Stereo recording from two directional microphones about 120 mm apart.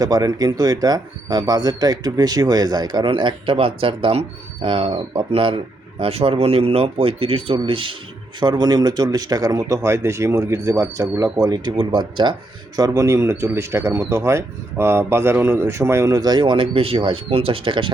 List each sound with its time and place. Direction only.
0.0 s speech: 30° right (ahead or behind)
12.7 s a man's voice: 30° right (ahead or behind)